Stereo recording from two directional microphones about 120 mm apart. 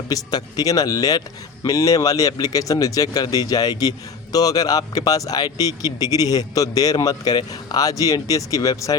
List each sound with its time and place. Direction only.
0.1 s speech: 35° left (ahead or behind)